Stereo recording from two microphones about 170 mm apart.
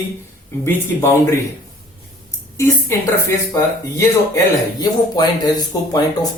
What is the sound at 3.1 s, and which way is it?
Speech, 15° left (ahead or behind).